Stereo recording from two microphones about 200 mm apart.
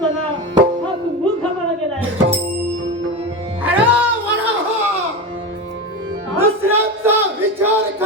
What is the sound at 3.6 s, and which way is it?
Music, 10° right (ahead or behind).